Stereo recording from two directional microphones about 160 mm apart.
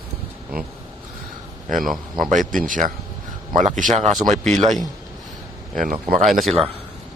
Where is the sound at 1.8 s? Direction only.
Centre (ahead or behind).